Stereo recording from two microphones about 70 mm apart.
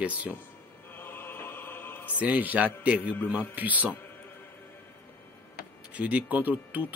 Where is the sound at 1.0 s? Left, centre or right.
Left.